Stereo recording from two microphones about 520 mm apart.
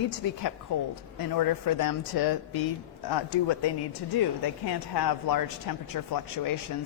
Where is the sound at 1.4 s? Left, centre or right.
Left.